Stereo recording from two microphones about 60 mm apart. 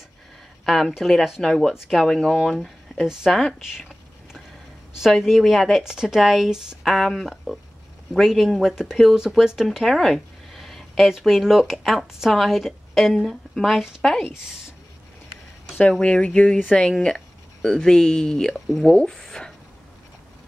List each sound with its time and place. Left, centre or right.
0.7 s speech: centre
4.9 s speech: centre
9.7 s a sound: centre
11.1 s speech: centre
15.8 s speech: centre